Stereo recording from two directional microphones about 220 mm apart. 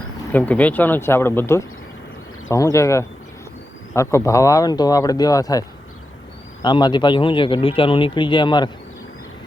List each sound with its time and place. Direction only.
0.3 s speech: 10° left (ahead or behind)